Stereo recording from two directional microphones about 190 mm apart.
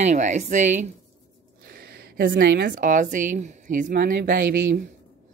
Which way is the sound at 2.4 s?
65° right (ahead or behind).